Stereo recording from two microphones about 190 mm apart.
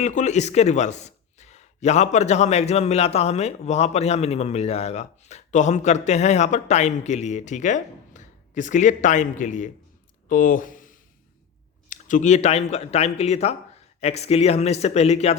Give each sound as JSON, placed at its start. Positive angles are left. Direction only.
{"t": 0.0, "sound": "a man's voice", "side_deg": 40}